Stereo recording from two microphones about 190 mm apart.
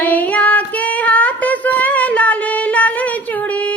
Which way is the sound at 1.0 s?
5° left (ahead or behind).